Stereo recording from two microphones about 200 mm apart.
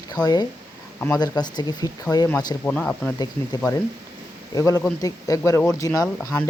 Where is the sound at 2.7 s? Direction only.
5° left (ahead or behind).